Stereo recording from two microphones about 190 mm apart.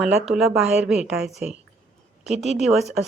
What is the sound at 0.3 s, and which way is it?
A woman's voice, centre (ahead or behind).